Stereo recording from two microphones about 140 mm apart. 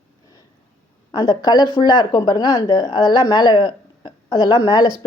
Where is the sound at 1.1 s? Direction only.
30° left (ahead or behind).